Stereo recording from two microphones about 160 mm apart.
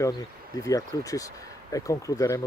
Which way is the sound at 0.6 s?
20° left (ahead or behind).